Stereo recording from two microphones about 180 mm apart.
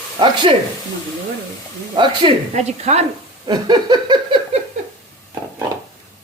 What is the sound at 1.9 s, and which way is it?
Laughter, 25° right (ahead or behind).